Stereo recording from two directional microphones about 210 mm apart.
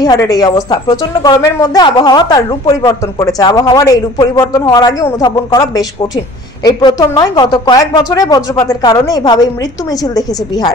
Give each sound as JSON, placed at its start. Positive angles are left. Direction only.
{"t": 0.0, "sound": "a woman's voice", "side_deg": 15}